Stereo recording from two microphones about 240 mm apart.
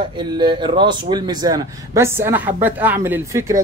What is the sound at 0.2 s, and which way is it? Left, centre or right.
Speech, centre.